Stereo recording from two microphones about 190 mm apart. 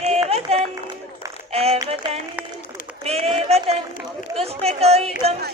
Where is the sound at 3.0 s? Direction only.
30° right (ahead or behind).